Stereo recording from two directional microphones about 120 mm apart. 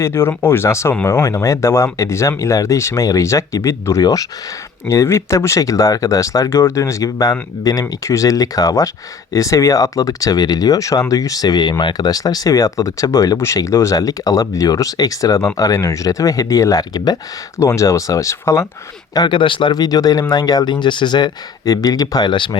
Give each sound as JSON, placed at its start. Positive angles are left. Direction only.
{"t": 0.0, "sound": "speech", "side_deg": 20}
{"t": 19.1, "sound": "speech", "side_deg": 40}